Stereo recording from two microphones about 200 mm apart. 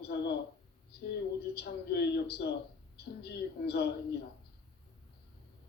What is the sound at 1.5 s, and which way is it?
Speech, 50° left (ahead or behind).